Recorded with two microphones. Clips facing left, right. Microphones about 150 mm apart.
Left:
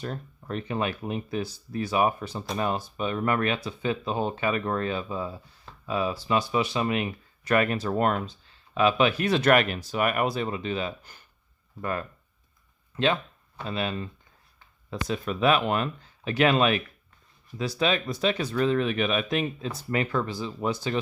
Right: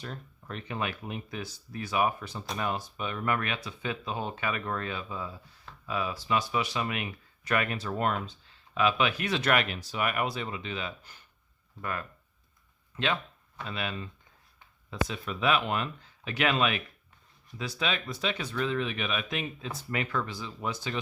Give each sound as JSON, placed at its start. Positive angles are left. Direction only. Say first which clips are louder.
{"t": 0.0, "sound": "speech", "louder": "left 6 dB", "side_deg": 40}
{"t": 13.6, "sound": "speech", "louder": "left 5 dB", "side_deg": 35}